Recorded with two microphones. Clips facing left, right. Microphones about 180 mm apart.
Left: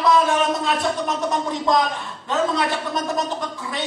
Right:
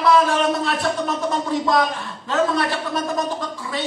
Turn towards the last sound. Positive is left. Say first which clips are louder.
# right 1 dB
turn(degrees=20)  # may be behind; listen again after turning